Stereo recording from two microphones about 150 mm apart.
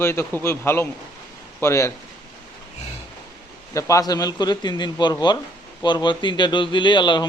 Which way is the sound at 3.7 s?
20° left (ahead or behind).